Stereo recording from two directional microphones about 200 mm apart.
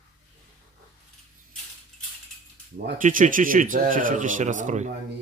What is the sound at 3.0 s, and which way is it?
A man's voice, 40° right (ahead or behind).